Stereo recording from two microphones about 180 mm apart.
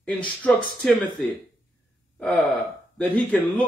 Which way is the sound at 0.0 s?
10° left (ahead or behind).